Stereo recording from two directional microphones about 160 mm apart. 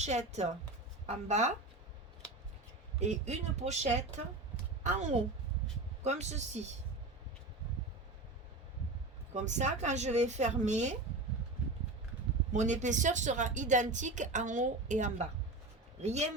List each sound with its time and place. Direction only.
0.0 s speech: 45° right (ahead or behind)
3.0 s a woman's voice: 45° right (ahead or behind)
9.3 s speech: 45° right (ahead or behind)
12.5 s speech: 50° right (ahead or behind)